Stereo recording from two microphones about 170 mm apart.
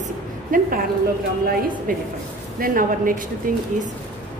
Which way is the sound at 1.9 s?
55° right (ahead or behind).